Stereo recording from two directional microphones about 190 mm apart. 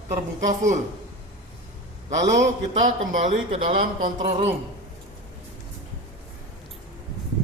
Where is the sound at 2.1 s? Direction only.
40° right (ahead or behind).